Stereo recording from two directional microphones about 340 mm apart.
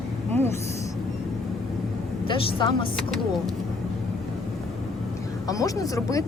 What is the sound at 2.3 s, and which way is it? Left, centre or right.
Speech, centre.